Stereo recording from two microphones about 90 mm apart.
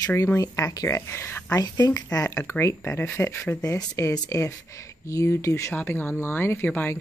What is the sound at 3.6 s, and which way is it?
Speech, 40° left (ahead or behind).